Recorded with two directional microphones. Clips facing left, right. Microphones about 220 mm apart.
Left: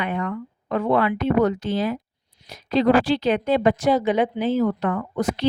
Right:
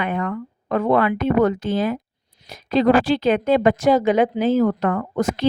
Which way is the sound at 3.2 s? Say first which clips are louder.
Right 3 dB; 90° right.